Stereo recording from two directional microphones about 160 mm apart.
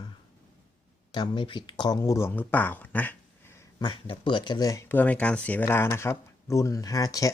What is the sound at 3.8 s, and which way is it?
Speech, 30° left (ahead or behind).